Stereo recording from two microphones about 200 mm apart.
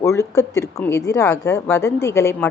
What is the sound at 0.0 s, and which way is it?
A woman's voice, 15° left (ahead or behind).